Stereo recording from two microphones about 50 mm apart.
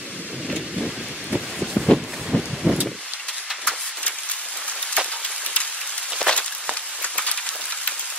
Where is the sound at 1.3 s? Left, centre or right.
Centre.